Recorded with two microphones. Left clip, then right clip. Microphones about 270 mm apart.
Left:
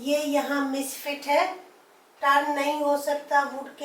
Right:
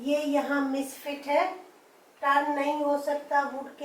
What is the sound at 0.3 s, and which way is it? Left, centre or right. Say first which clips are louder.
A woman's voice: left 1 dB; centre.